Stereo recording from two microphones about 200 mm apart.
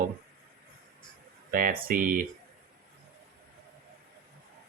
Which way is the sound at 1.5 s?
45° right (ahead or behind).